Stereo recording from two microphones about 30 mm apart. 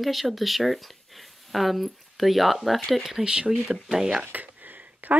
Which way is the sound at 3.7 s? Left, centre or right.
Centre.